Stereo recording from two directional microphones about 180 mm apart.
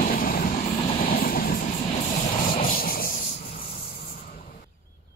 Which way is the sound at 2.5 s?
50° left (ahead or behind).